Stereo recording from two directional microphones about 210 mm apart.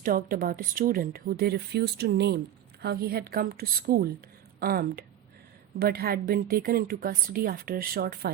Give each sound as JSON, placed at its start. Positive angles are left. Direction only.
{"t": 0.0, "sound": "speech", "side_deg": -40}